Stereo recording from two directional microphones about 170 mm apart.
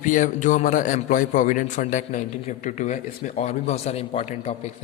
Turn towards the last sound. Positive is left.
turn(degrees=40)  # may be behind; listen again after turning